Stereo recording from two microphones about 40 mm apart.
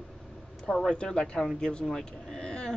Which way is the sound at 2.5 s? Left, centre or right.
Centre.